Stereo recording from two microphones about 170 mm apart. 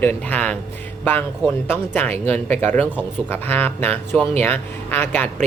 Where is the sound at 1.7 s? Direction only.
10° left (ahead or behind).